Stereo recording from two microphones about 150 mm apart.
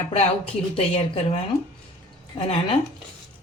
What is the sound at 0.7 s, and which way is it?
A woman's voice, 45° left (ahead or behind).